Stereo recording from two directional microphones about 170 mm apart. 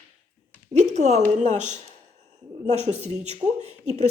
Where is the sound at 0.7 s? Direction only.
40° right (ahead or behind).